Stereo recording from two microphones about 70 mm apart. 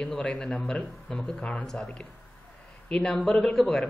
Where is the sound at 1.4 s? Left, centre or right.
Centre.